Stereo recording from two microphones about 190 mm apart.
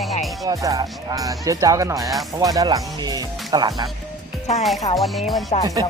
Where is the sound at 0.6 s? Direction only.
20° right (ahead or behind).